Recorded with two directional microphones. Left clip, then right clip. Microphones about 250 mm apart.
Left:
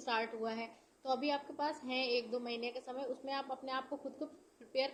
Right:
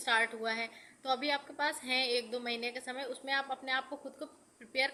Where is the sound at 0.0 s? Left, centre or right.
Centre.